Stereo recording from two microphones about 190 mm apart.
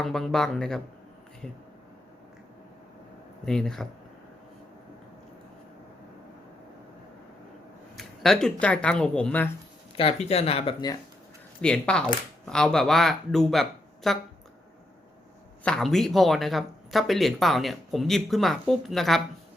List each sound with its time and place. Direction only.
0.0 s speech: centre (ahead or behind)
3.4 s speech: 5° left (ahead or behind)
7.9 s speech: centre (ahead or behind)
9.9 s speech: 30° left (ahead or behind)
11.6 s speech: 5° left (ahead or behind)
15.6 s speech: 5° left (ahead or behind)